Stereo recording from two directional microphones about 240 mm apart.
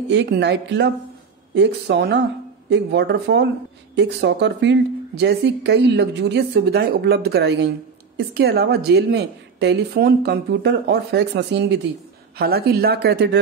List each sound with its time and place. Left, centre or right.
0.1 s a woman's voice: right